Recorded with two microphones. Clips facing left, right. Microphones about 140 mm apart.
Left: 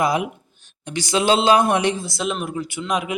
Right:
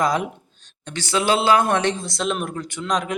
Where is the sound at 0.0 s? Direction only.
10° left (ahead or behind).